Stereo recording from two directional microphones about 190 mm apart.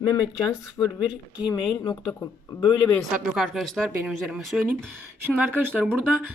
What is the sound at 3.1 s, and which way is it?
Speech, centre (ahead or behind).